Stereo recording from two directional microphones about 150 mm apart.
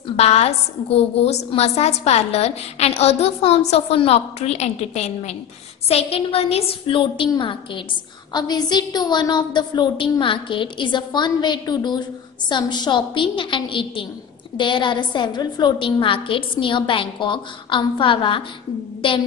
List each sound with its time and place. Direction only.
0.1 s a woman's voice: 45° left (ahead or behind)